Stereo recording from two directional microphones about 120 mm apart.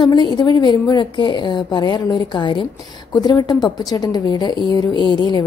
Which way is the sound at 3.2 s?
35° left (ahead or behind).